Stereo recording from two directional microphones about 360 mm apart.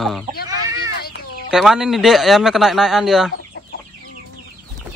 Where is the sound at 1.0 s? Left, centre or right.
Left.